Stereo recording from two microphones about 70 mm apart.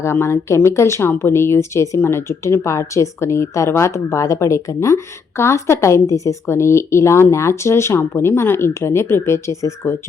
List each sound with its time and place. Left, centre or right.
0.0 s a woman's voice: left